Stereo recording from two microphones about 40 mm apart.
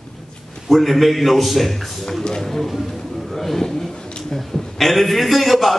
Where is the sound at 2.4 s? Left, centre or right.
Centre.